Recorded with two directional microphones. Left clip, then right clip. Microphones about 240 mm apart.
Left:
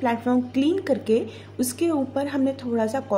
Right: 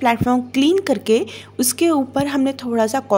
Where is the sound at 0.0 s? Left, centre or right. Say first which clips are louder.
Right 6 dB; right.